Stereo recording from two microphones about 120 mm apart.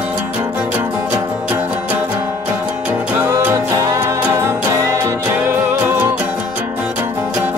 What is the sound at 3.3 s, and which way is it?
Music, 25° right (ahead or behind).